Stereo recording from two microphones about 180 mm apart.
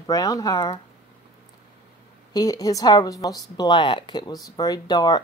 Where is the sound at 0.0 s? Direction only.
20° left (ahead or behind).